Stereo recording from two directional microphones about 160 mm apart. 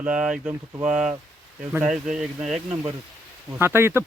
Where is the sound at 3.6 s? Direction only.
15° right (ahead or behind).